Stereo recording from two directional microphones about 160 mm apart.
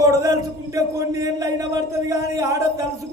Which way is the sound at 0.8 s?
20° right (ahead or behind).